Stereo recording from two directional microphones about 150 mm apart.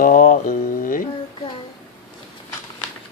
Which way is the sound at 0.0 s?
65° left (ahead or behind).